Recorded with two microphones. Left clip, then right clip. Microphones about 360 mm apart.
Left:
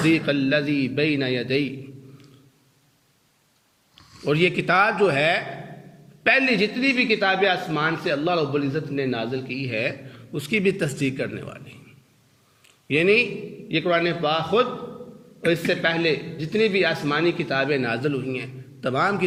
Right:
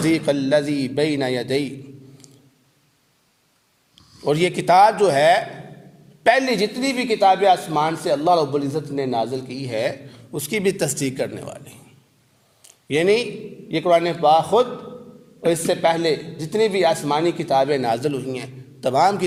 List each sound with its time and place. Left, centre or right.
0.0 s a man's voice: centre
4.3 s a man's voice: centre
12.6 s a sound: right
13.7 s a man's voice: centre